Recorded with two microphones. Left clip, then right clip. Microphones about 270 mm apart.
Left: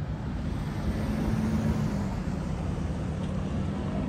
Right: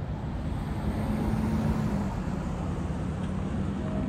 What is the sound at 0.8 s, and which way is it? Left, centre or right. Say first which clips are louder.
Vehicle: right 1 dB; right.